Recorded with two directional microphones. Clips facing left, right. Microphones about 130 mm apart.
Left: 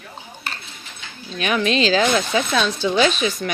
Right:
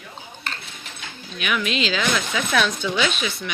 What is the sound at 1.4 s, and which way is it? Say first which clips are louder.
Speech: left 5 dB; 35° left (ahead or behind).